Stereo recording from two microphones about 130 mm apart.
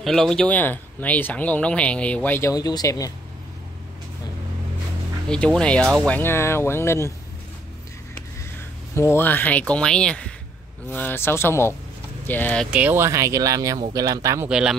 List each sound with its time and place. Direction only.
0.0 s speech: 5° left (ahead or behind)
2.5 s speech: 30° left (ahead or behind)
5.3 s speech: 5° left (ahead or behind)
6.1 s speech: 20° left (ahead or behind)
8.9 s speech: 20° left (ahead or behind)
12.7 s speech: 15° right (ahead or behind)
14.5 s speech: 5° right (ahead or behind)